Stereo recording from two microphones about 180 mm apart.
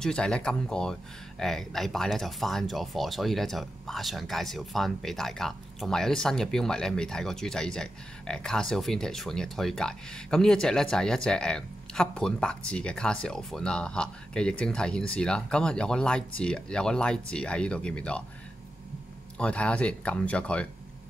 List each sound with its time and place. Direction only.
0.0 s speech: 5° left (ahead or behind)
19.3 s speech: 5° left (ahead or behind)